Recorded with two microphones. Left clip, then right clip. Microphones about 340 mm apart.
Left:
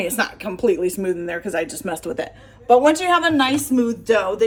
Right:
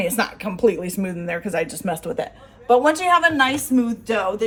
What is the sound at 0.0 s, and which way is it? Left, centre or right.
Speech, centre.